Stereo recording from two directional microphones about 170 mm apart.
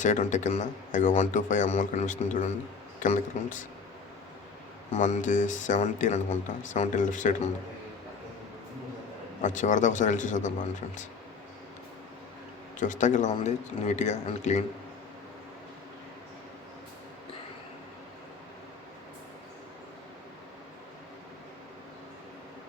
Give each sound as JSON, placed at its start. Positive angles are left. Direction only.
{"t": 0.0, "sound": "speech", "side_deg": 45}
{"t": 4.9, "sound": "speech", "side_deg": 45}
{"t": 9.4, "sound": "speech", "side_deg": 45}
{"t": 12.8, "sound": "speech", "side_deg": 45}